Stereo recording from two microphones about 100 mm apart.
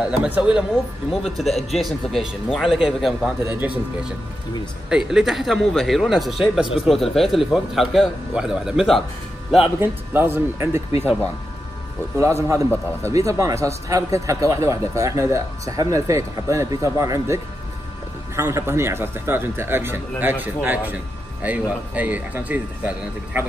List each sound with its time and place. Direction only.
0.0 s speech: 10° right (ahead or behind)
1.4 s a man's voice: centre (ahead or behind)
3.5 s a man's voice: 15° right (ahead or behind)
9.8 s speech: 25° right (ahead or behind)
12.2 s a man's voice: 30° right (ahead or behind)